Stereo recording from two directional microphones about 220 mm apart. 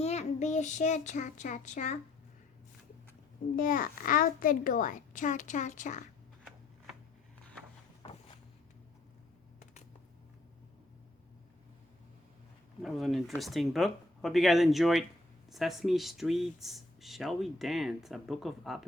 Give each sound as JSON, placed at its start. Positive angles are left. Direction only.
{"t": 0.0, "sound": "speech", "side_deg": 30}
{"t": 3.5, "sound": "a child's voice", "side_deg": 40}
{"t": 8.0, "sound": "a sound", "side_deg": 20}
{"t": 12.8, "sound": "speech", "side_deg": 0}